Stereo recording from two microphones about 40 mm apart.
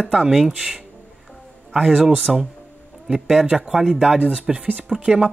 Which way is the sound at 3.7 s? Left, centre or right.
Centre.